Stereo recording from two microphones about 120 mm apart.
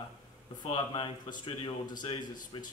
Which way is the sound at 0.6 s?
40° left (ahead or behind).